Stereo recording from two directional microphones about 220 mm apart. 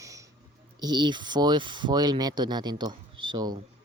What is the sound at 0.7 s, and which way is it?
Speech, 20° right (ahead or behind).